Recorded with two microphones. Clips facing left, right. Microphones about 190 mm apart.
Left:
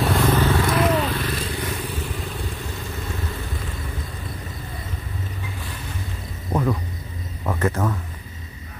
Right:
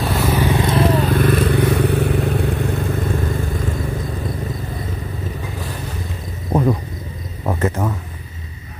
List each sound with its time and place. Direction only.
0.0 s vehicle: 5° right (ahead or behind)
0.3 s vehicle: 15° right (ahead or behind); by 3.7 s 50° right (ahead or behind)
6.5 s a sound: 30° right (ahead or behind)